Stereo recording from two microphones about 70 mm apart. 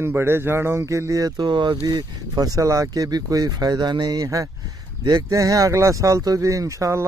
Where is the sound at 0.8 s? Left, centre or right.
Right.